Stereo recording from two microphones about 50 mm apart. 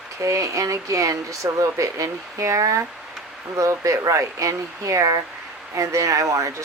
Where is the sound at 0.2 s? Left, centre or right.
Right.